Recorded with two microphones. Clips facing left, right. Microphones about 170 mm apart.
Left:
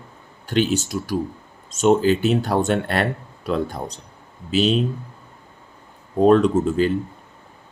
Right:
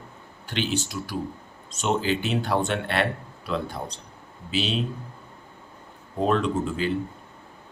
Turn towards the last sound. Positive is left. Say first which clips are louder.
# left 7 dB
turn(degrees=45)  # may be behind; listen again after turning